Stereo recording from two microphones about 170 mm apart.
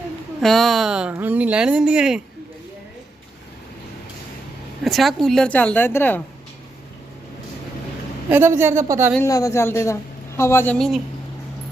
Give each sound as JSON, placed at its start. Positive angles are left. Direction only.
{"t": 0.4, "sound": "speech", "side_deg": 0}
{"t": 4.8, "sound": "a woman's voice", "side_deg": 0}
{"t": 8.3, "sound": "speech", "side_deg": -15}
{"t": 9.2, "sound": "a woman's voice", "side_deg": 20}
{"t": 10.8, "sound": "speech", "side_deg": 0}